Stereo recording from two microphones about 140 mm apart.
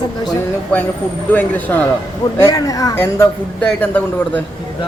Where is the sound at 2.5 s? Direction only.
25° left (ahead or behind).